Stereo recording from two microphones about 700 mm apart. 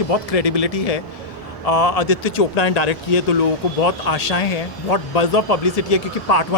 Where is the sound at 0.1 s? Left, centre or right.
Left.